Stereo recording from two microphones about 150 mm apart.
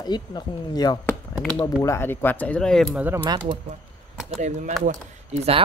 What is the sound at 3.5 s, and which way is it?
Speech, 40° right (ahead or behind).